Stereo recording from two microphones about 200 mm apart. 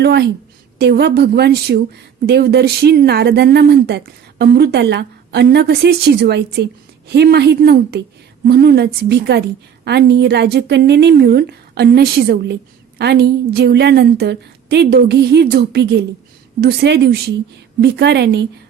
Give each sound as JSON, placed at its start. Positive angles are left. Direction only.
{"t": 0.0, "sound": "speech", "side_deg": -55}